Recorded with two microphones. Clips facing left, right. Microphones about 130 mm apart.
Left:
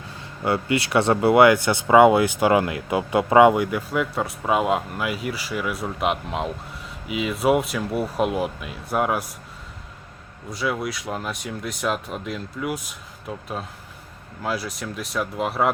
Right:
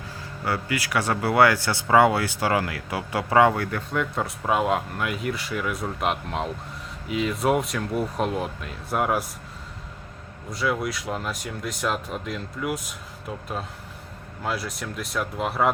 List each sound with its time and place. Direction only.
0.4 s speech: 25° left (ahead or behind); by 9.2 s centre (ahead or behind)
10.5 s speech: centre (ahead or behind)
14.4 s speech: centre (ahead or behind)